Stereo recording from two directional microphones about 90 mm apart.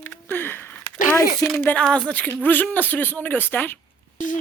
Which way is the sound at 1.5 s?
20° left (ahead or behind).